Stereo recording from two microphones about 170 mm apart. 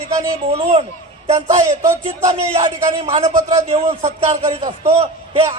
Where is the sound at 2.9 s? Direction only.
40° right (ahead or behind).